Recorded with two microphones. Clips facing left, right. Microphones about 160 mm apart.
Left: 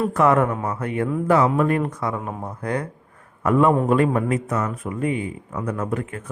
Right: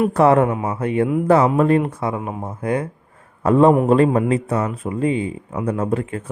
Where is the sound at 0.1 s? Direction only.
30° right (ahead or behind).